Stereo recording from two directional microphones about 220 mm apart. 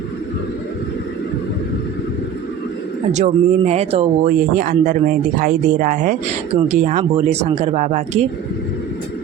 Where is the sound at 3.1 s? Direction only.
30° right (ahead or behind).